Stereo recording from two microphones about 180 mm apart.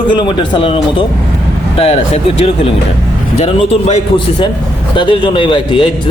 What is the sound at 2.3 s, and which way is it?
A man's voice, 35° left (ahead or behind).